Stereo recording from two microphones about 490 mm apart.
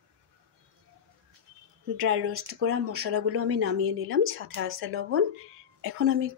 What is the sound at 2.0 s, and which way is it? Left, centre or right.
Speech, right.